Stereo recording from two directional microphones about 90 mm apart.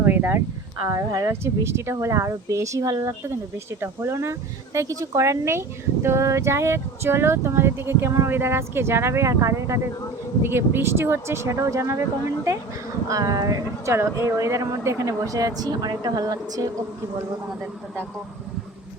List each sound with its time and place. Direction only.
0.0 s a sound: 25° right (ahead or behind)
0.8 s speech: 40° right (ahead or behind)
13.1 s speech: 40° right (ahead or behind)